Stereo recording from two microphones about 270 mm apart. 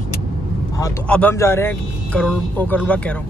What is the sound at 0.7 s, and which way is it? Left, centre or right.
Speech, centre.